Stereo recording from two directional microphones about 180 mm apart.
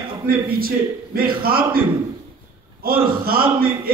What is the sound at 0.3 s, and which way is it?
A man's voice, 55° right (ahead or behind).